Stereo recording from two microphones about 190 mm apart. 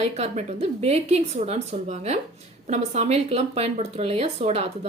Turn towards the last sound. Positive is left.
turn(degrees=-30)  # may be behind; listen again after turning